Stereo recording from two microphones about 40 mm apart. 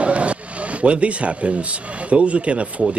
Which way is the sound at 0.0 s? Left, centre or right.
Right.